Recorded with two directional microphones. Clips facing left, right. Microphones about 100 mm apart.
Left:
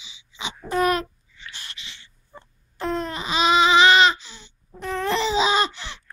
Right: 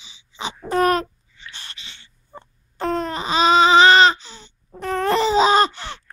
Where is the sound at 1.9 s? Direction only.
45° right (ahead or behind).